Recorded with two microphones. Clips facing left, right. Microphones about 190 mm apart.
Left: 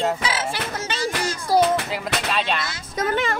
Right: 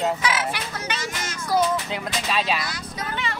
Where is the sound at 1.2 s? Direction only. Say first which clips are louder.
Left 3 dB; 30° left (ahead or behind).